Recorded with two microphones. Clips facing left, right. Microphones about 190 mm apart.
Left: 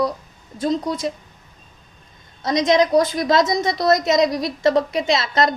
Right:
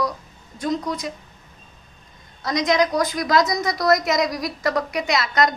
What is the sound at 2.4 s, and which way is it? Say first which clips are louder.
A woman's voice: left 3 dB; 25° left (ahead or behind).